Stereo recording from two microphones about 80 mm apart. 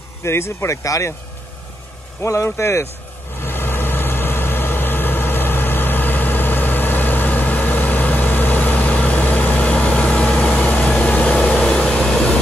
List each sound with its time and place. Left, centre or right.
0.2 s speech: left
2.2 s speech: left
3.3 s vehicle: left; by 12.4 s centre